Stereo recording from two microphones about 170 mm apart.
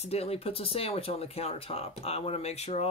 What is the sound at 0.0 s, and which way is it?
Speech, 35° left (ahead or behind).